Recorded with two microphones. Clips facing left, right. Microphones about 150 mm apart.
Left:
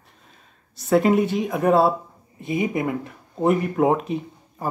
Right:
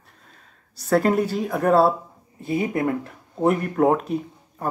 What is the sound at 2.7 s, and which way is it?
Speech, 5° left (ahead or behind).